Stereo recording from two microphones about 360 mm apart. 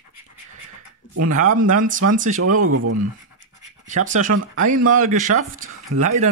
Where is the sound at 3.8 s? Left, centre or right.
Right.